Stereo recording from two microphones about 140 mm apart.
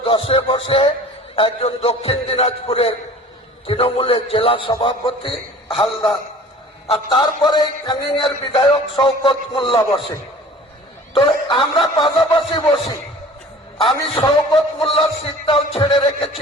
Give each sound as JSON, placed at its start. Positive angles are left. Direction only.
{"t": 0.0, "sound": "music", "side_deg": 40}
{"t": 1.4, "sound": "a man's voice", "side_deg": 40}
{"t": 3.7, "sound": "music", "side_deg": 40}
{"t": 6.8, "sound": "a man's voice", "side_deg": 45}
{"t": 7.2, "sound": "music", "side_deg": 30}
{"t": 11.1, "sound": "music", "side_deg": 40}